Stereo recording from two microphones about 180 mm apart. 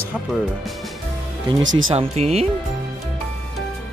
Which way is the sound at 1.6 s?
90° right.